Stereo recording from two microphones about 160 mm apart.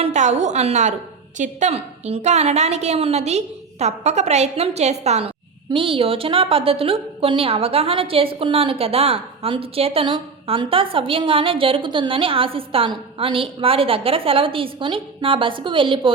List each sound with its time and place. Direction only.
0.0 s a woman's voice: 45° right (ahead or behind)